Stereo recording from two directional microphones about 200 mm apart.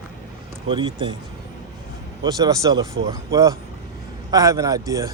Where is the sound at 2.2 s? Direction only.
20° right (ahead or behind).